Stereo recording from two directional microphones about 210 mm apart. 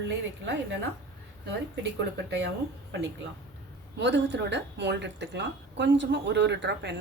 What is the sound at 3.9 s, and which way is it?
Speech, 55° right (ahead or behind).